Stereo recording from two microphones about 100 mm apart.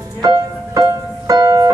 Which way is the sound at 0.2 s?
40° right (ahead or behind).